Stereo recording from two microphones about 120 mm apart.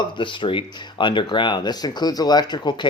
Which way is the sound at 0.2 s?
45° left (ahead or behind).